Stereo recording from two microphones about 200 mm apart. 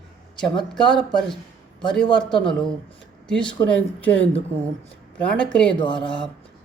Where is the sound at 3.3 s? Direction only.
5° left (ahead or behind).